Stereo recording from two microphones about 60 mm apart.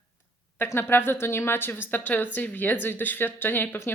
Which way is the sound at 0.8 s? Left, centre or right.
Left.